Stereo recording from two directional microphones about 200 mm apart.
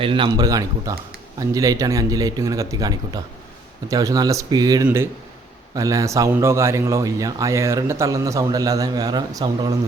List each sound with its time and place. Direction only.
0.0 s a man's voice: 25° right (ahead or behind)